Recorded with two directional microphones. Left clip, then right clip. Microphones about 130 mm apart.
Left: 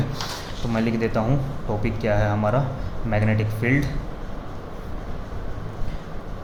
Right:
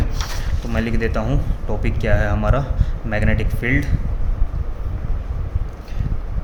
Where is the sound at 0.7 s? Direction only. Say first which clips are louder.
Right 1 dB; 75° right (ahead or behind).